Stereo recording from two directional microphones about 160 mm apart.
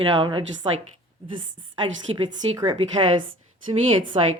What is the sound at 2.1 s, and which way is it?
Speech, 25° right (ahead or behind).